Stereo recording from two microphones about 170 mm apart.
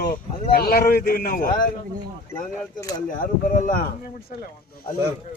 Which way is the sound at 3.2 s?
50° left (ahead or behind).